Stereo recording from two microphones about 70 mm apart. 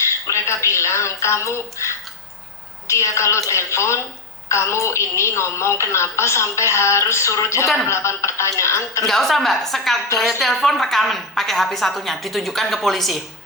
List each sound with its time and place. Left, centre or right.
0.3 s a woman's voice: left
9.0 s a woman's voice: centre